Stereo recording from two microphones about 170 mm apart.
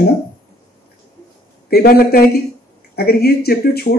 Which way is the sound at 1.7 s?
65° left (ahead or behind).